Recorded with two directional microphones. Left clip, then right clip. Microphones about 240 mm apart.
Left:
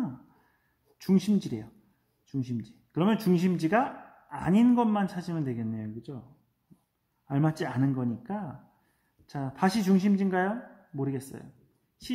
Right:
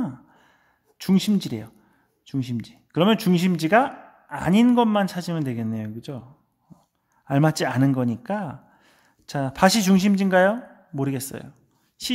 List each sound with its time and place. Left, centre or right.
0.9 s speech: right
7.2 s speech: right